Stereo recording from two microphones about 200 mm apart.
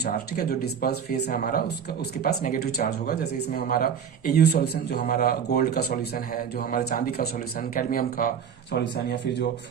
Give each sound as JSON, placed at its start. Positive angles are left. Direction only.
{"t": 0.0, "sound": "speech", "side_deg": 50}
{"t": 8.7, "sound": "speech", "side_deg": 60}